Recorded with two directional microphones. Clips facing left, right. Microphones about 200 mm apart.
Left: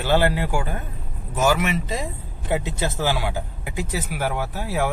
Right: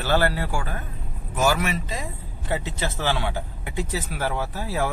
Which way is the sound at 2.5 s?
10° left (ahead or behind).